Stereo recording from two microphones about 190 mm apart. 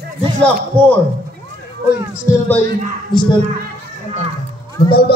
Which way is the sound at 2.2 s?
15° left (ahead or behind).